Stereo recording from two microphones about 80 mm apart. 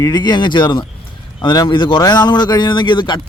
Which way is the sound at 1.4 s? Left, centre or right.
Left.